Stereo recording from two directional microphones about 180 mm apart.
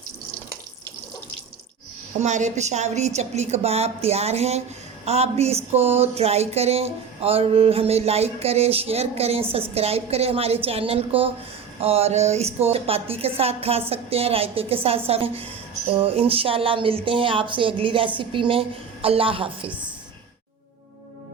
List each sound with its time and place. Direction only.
2.2 s a woman's voice: 40° right (ahead or behind)
19.6 s a woman's voice: 5° right (ahead or behind)